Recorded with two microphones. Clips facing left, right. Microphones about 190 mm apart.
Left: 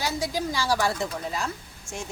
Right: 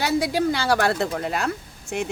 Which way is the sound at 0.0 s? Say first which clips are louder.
Right 7 dB; 65° right (ahead or behind).